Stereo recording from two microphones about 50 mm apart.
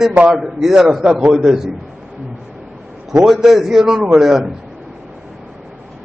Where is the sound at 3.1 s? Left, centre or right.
Centre.